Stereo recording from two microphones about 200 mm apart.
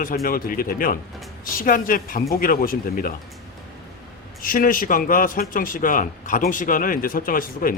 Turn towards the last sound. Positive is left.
turn(degrees=45)  # may be behind; listen again after turning